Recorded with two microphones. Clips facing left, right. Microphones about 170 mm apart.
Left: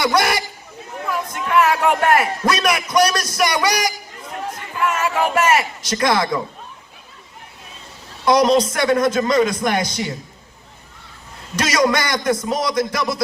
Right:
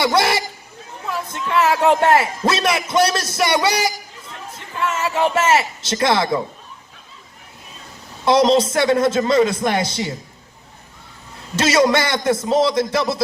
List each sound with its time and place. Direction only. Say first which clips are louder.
0.0 s speech: right 1 dB; 25° right (ahead or behind)
1.1 s a sound: left 2 dB; 25° right (ahead or behind)
2.4 s a man's voice: even; 25° right (ahead or behind)
8.2 s a man's voice: even; 25° right (ahead or behind)
11.5 s a man's voice: right 2 dB; 25° right (ahead or behind)